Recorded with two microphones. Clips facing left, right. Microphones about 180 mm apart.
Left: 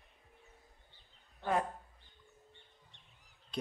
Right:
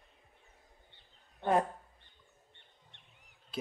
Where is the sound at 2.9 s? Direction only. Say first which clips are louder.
Right 1 dB; 65° right (ahead or behind).